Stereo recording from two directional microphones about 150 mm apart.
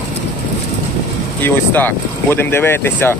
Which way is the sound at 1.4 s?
10° left (ahead or behind).